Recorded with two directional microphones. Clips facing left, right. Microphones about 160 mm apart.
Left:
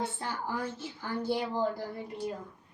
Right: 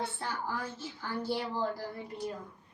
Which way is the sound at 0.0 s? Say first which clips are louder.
Left 1 dB; 15° left (ahead or behind).